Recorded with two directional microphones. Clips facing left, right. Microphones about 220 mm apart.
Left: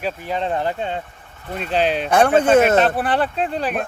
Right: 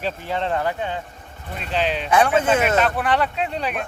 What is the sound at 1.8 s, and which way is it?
Speech, 45° left (ahead or behind).